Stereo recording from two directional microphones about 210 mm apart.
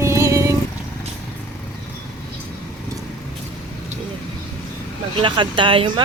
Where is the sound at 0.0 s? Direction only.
15° right (ahead or behind).